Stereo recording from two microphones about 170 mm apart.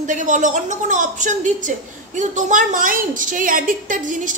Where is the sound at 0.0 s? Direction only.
50° right (ahead or behind).